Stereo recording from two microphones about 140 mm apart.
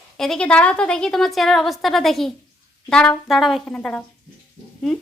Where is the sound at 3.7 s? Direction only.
10° left (ahead or behind).